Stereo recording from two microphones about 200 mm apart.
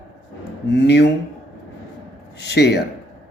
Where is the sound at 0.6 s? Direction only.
60° left (ahead or behind).